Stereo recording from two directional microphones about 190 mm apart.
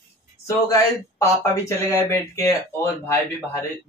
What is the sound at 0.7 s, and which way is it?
Speech, 15° left (ahead or behind).